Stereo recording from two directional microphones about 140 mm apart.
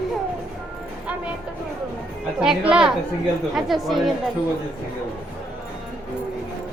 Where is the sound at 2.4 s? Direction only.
5° right (ahead or behind).